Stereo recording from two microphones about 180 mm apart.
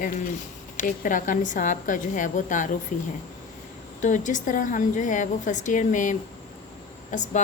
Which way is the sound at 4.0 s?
45° left (ahead or behind).